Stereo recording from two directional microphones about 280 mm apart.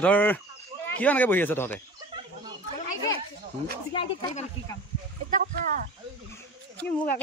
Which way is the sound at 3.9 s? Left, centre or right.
Centre.